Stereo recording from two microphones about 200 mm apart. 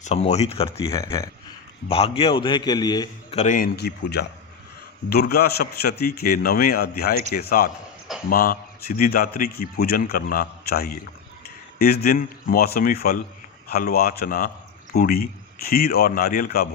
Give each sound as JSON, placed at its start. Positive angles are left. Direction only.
{"t": 0.0, "sound": "speech", "side_deg": 35}
{"t": 0.9, "sound": "speech", "side_deg": 15}
{"t": 1.9, "sound": "a man's voice", "side_deg": 30}
{"t": 3.3, "sound": "speech", "side_deg": 40}
{"t": 3.8, "sound": "a man's voice", "side_deg": 55}